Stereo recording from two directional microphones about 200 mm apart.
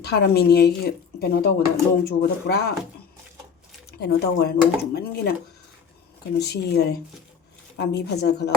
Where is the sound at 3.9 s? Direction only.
55° left (ahead or behind).